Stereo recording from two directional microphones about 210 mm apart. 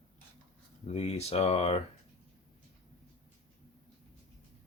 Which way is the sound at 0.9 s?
30° left (ahead or behind).